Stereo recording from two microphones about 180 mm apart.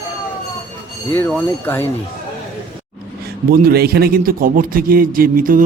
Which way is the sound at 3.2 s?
60° right (ahead or behind).